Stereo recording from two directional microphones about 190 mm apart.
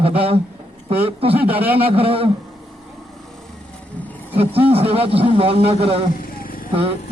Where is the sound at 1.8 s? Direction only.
30° right (ahead or behind).